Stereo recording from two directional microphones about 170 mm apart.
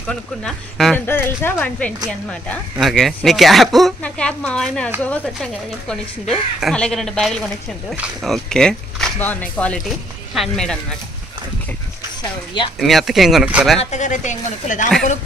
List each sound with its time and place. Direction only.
0.1 s speech: 5° left (ahead or behind)
12.7 s speech: centre (ahead or behind)
13.7 s speech: 45° left (ahead or behind)